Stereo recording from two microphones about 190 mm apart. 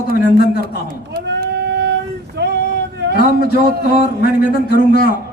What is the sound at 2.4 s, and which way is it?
Female singing, 65° right (ahead or behind).